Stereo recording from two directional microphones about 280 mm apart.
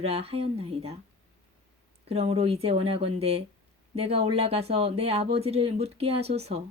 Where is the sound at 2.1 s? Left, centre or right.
Right.